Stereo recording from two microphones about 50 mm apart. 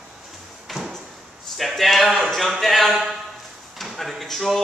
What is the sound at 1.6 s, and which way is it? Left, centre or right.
A man's voice, centre.